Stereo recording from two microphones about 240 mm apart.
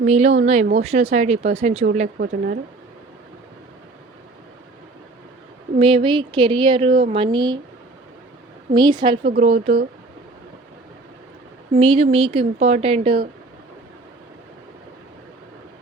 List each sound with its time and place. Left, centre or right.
0.0 s speech: right
1.8 s speech: right
5.8 s speech: right
8.7 s speech: centre
9.2 s speech: right
11.7 s speech: right